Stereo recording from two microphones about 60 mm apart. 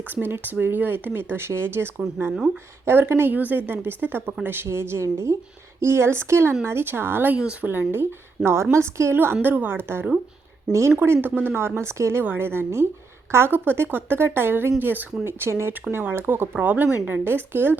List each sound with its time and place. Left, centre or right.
0.1 s a woman's voice: right
3.3 s a woman's voice: right
8.4 s a woman's voice: centre
8.7 s a woman's voice: right
9.1 s speech: right
10.7 s a woman's voice: right
12.2 s speech: right
15.2 s a woman's voice: right